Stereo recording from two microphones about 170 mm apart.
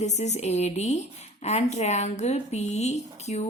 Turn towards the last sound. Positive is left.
turn(degrees=40)  # may be behind; listen again after turning